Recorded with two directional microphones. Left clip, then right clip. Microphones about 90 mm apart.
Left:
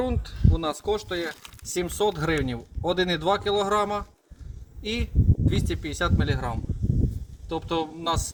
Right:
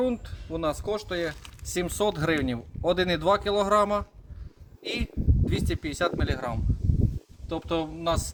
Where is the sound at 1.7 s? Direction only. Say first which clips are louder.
Left 1 dB; 90° right; by 8.3 s 45° right (ahead or behind).